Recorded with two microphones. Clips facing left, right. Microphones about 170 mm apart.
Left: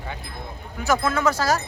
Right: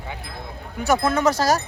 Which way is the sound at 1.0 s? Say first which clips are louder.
Right 2 dB; 20° right (ahead or behind).